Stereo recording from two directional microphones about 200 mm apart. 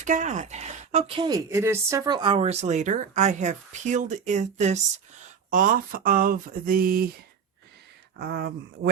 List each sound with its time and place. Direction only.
0.0 s speech: 40° right (ahead or behind)
8.2 s speech: 50° right (ahead or behind)